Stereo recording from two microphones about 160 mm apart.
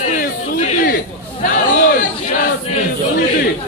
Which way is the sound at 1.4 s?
60° left (ahead or behind).